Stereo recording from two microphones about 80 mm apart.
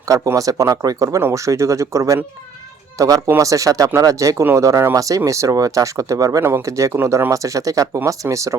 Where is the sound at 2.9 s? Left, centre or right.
Right.